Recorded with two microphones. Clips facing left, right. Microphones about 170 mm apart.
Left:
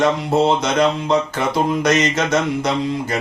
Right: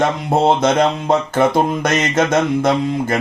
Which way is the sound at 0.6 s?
50° right (ahead or behind).